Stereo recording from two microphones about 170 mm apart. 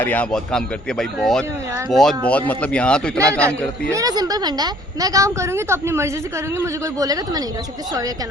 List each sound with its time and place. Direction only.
0.0 s speech: 10° left (ahead or behind)
3.9 s a woman's voice: 20° right (ahead or behind)